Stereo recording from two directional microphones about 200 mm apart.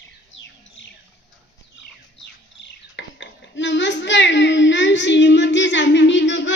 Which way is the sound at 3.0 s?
65° left (ahead or behind).